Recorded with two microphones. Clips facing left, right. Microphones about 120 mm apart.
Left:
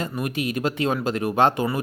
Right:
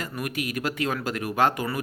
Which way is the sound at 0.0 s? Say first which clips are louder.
Left 4 dB; 25° left (ahead or behind).